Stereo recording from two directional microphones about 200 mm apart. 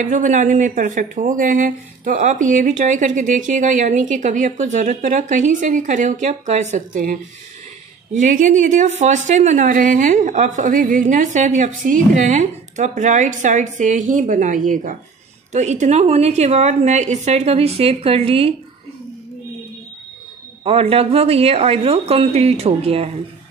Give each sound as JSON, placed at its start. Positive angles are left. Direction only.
{"t": 0.0, "sound": "speech", "side_deg": -40}
{"t": 20.6, "sound": "a woman's voice", "side_deg": -30}